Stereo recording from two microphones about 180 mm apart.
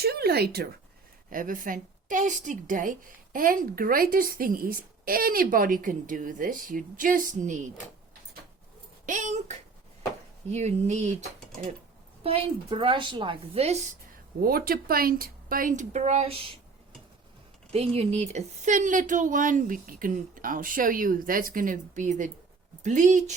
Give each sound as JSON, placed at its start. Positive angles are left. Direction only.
{"t": 0.0, "sound": "speech", "side_deg": -60}
{"t": 1.3, "sound": "a woman's voice", "side_deg": -50}
{"t": 9.0, "sound": "a woman's voice", "side_deg": -45}
{"t": 12.2, "sound": "a woman's voice", "side_deg": -30}
{"t": 14.4, "sound": "a woman's voice", "side_deg": -55}
{"t": 17.7, "sound": "a woman's voice", "side_deg": -35}